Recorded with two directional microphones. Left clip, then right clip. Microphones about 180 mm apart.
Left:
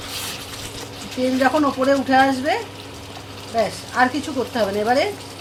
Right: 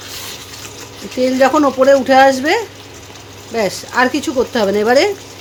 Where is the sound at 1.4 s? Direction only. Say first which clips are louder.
Right 8 dB; 65° right (ahead or behind).